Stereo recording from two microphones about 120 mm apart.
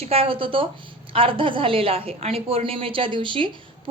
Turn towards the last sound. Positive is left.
turn(degrees=-45)  # may be behind; listen again after turning